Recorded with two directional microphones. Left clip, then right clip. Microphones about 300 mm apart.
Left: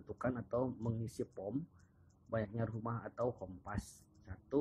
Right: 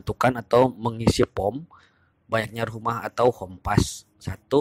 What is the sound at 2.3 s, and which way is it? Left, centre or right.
Speech, right.